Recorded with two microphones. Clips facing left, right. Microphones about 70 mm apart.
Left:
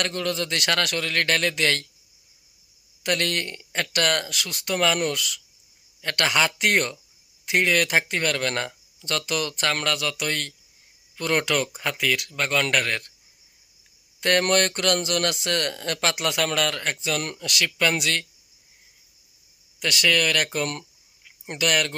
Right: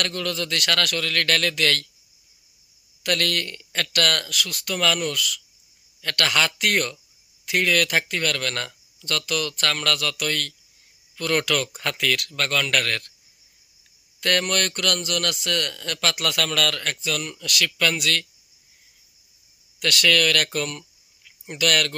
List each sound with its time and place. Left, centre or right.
0.0 s speech: left
3.0 s speech: left
11.8 s speech: centre
14.2 s speech: left
19.8 s speech: centre